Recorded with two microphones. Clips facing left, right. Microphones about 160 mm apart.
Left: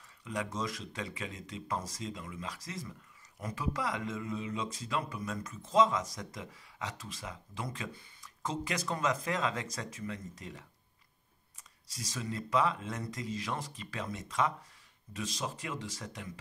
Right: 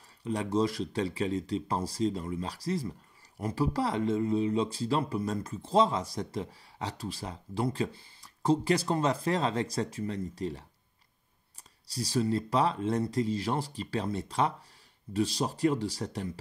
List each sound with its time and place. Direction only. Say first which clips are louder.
0.2 s speech: right 8 dB; 30° right (ahead or behind)
11.9 s speech: right 11 dB; 35° right (ahead or behind)